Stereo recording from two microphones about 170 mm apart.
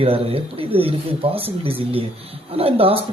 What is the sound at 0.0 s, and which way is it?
Speech, 35° right (ahead or behind).